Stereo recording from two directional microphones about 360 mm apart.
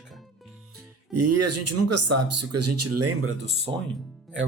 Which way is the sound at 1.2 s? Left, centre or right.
Right.